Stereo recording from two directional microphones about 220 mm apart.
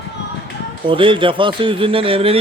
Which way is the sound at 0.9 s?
25° right (ahead or behind).